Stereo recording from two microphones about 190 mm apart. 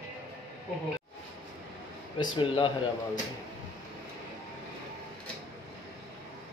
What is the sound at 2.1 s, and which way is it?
Speech, 25° left (ahead or behind).